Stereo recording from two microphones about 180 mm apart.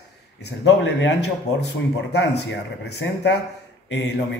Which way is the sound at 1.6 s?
70° left (ahead or behind).